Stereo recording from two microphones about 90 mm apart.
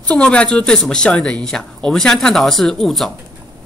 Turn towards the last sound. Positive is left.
turn(degrees=5)  # may be behind; listen again after turning